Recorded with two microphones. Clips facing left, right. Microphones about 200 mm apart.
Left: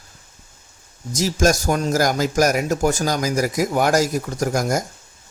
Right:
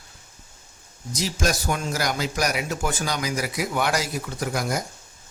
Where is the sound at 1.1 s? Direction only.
45° left (ahead or behind).